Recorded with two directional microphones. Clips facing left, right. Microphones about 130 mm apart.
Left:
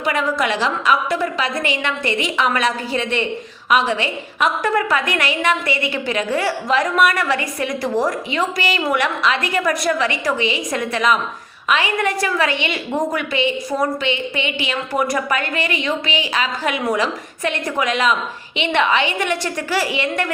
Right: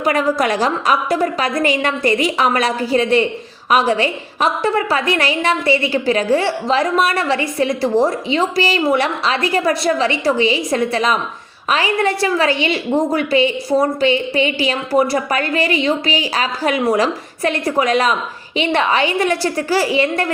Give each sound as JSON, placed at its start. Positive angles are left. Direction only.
{"t": 0.0, "sound": "a woman's voice", "side_deg": -40}